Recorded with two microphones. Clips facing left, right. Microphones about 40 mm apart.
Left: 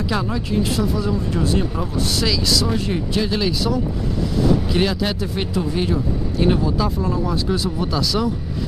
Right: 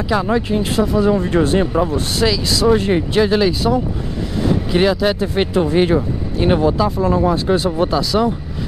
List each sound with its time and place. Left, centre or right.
0.3 s speech: right; by 5.1 s centre
5.2 s speech: right
7.9 s speech: right